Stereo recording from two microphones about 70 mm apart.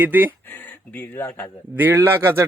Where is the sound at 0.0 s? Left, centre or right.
Right.